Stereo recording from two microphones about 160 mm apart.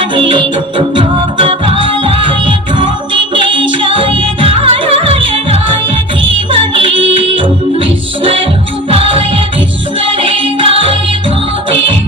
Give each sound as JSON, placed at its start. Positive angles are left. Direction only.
{"t": 0.0, "sound": "music", "side_deg": -30}